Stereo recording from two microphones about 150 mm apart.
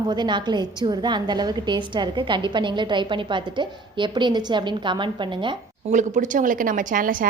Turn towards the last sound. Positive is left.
turn(degrees=-65)  # may be behind; listen again after turning